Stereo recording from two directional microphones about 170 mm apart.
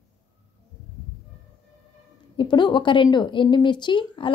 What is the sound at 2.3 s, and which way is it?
A woman's voice, 25° left (ahead or behind).